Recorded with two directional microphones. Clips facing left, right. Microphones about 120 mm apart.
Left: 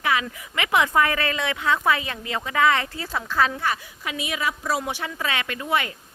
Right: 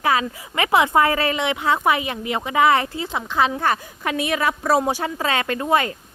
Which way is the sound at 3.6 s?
50° right (ahead or behind).